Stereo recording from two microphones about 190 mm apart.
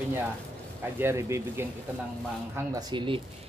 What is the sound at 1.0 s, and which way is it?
Speech, 15° right (ahead or behind).